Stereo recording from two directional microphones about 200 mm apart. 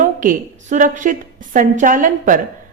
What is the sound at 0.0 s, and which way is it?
A woman's voice, 40° right (ahead or behind).